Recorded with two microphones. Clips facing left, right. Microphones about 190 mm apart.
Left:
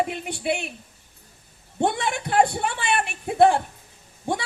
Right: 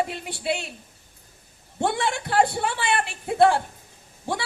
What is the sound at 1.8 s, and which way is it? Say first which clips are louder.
A woman's voice: left 1 dB; 20° left (ahead or behind).